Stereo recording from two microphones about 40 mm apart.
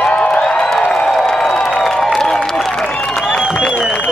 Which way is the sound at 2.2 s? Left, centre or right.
Centre.